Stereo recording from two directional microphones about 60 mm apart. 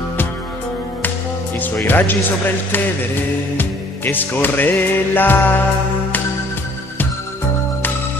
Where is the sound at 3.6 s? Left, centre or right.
Left.